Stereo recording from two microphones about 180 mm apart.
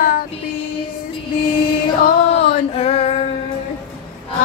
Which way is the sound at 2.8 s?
35° left (ahead or behind).